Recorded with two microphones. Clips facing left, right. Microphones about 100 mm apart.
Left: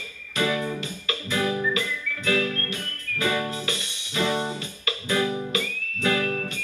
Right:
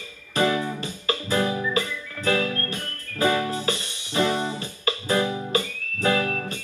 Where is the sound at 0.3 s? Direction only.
35° right (ahead or behind).